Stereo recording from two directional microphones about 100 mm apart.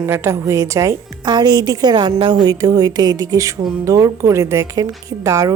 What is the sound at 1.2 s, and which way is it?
A woman's voice, 45° right (ahead or behind).